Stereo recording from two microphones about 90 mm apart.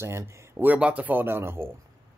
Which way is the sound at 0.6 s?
15° right (ahead or behind).